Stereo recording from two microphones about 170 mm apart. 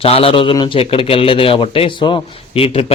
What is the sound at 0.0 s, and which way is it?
A man's voice, 35° left (ahead or behind).